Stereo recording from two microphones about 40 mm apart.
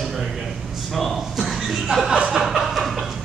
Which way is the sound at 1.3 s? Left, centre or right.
Centre.